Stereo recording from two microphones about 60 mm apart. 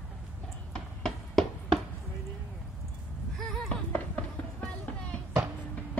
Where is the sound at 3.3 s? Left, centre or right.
Centre.